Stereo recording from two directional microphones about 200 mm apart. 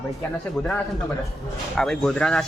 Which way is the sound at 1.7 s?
5° left (ahead or behind).